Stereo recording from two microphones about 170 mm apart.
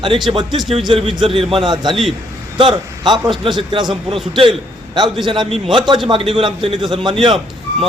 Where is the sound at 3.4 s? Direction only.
25° right (ahead or behind).